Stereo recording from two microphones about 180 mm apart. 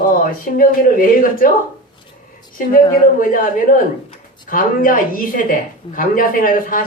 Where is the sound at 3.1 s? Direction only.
50° left (ahead or behind).